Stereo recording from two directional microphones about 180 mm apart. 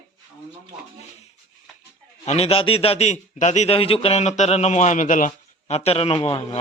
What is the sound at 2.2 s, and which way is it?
A man's voice, 35° left (ahead or behind).